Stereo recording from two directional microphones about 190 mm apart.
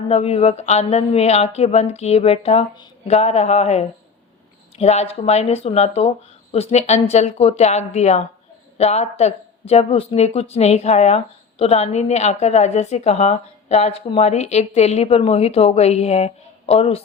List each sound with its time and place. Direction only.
0.1 s speech: 35° left (ahead or behind)